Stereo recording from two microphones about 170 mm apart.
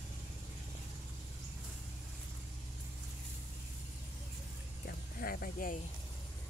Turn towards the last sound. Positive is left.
turn(degrees=55)  # may be behind; listen again after turning